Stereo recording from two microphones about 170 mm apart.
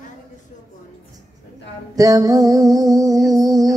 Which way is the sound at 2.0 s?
20° right (ahead or behind).